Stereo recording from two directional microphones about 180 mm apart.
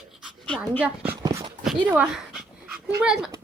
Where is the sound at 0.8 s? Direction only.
10° right (ahead or behind).